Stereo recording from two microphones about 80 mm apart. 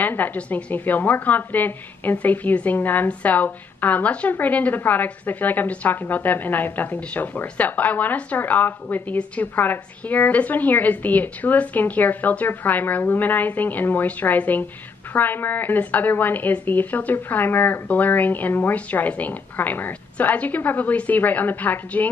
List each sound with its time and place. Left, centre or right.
0.0 s a woman's voice: left